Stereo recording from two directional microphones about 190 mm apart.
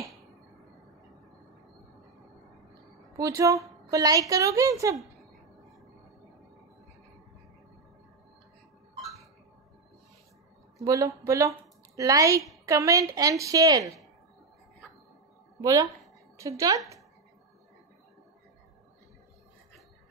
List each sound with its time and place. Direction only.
3.2 s a woman's voice: 15° right (ahead or behind)
10.8 s a woman's voice: 15° right (ahead or behind)
15.6 s a woman's voice: 20° right (ahead or behind)